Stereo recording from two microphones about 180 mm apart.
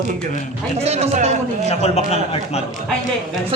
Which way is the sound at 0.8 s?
35° right (ahead or behind).